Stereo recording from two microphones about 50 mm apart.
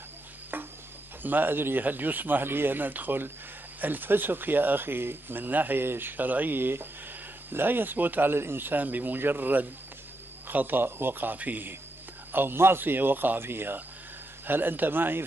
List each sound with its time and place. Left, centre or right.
1.2 s speech: right